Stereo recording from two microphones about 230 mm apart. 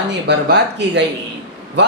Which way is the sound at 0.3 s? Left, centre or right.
Right.